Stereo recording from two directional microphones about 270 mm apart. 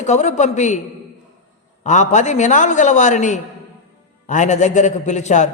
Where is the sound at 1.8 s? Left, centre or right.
Left.